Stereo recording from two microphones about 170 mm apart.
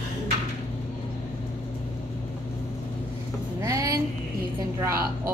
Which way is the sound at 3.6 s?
20° right (ahead or behind).